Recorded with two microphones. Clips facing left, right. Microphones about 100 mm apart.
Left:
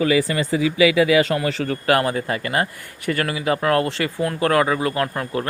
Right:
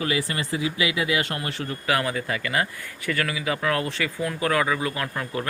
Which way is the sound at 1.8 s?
45° left (ahead or behind).